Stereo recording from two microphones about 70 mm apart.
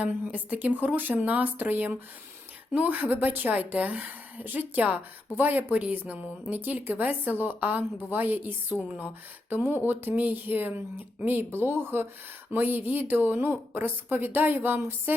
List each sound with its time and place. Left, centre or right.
0.0 s a woman's voice: right